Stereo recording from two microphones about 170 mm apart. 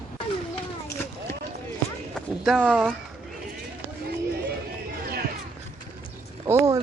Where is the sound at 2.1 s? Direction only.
5° left (ahead or behind).